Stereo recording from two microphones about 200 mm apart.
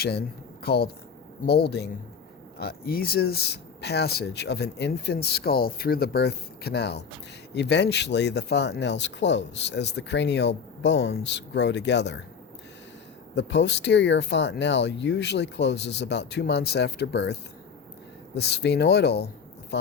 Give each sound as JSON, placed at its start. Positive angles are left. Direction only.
{"t": 0.0, "sound": "speech", "side_deg": 55}
{"t": 13.3, "sound": "speech", "side_deg": 60}
{"t": 18.3, "sound": "speech", "side_deg": 55}